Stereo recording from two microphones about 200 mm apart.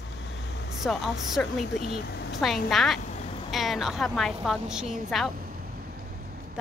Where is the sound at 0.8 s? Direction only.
Centre (ahead or behind).